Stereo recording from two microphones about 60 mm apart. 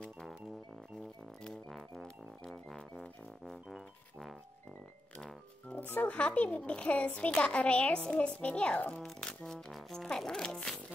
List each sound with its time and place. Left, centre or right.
1.4 s music: centre
5.1 s music: centre
5.8 s a child's voice: left
6.0 s a child's voice: left
9.0 s music: centre